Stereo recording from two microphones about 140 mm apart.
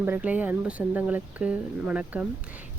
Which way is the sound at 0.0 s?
10° right (ahead or behind).